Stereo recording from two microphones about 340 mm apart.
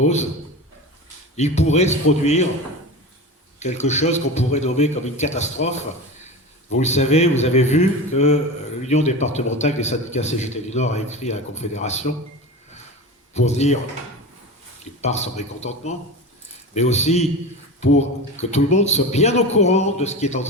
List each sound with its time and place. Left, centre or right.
0.0 s a man's voice: centre
1.4 s a man's voice: centre
3.6 s a man's voice: centre
6.7 s a man's voice: centre
13.3 s a man's voice: centre
15.0 s a man's voice: centre